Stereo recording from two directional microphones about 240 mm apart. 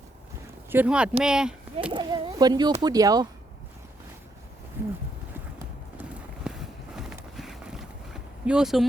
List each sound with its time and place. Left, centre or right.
0.7 s speech: centre
1.9 s speech: centre
4.8 s speech: centre
6.5 s walk: centre
6.9 s a sound: centre